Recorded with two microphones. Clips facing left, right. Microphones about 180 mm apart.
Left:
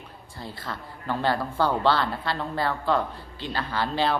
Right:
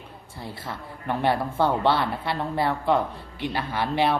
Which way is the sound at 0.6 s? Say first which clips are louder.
Right 1 dB; 25° right (ahead or behind).